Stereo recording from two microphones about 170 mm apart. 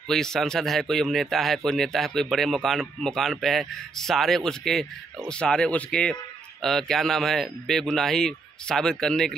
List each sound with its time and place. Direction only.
0.1 s speech: 5° left (ahead or behind)